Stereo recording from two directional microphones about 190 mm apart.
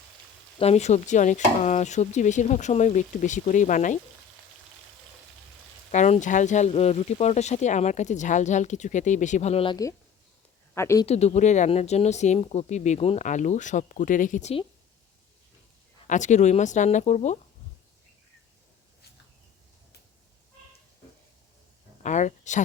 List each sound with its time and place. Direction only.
0.6 s speech: 35° left (ahead or behind)
5.9 s speech: 40° left (ahead or behind)
10.8 s speech: 15° left (ahead or behind)
11.0 s speech: 35° left (ahead or behind)
16.0 s speech: 40° left (ahead or behind)
22.0 s speech: 40° left (ahead or behind)